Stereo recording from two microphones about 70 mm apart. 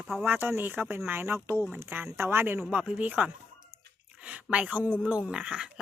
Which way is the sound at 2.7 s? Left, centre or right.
Centre.